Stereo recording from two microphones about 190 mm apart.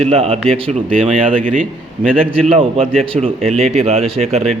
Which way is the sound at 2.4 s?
30° right (ahead or behind).